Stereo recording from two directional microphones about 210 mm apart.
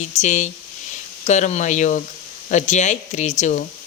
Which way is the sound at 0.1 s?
35° left (ahead or behind).